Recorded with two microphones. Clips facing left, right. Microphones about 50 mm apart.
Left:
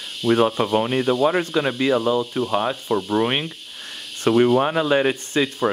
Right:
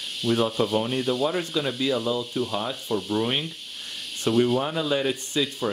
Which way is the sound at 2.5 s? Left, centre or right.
Left.